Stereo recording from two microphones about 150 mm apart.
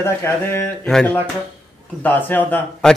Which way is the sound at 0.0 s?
15° left (ahead or behind).